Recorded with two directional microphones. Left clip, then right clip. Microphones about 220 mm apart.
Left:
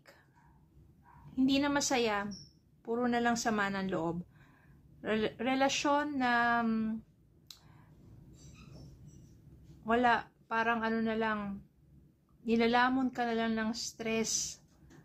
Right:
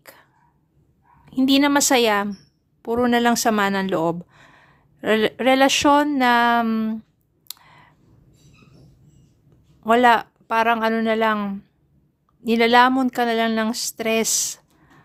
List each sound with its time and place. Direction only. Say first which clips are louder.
0.0 s throat clearing: right 13 dB; 50° right (ahead or behind)
1.4 s speech: right 13 dB; 50° right (ahead or behind)
7.4 s clicking: right 14 dB; 50° right (ahead or behind)
9.8 s speech: right 14 dB; 50° right (ahead or behind)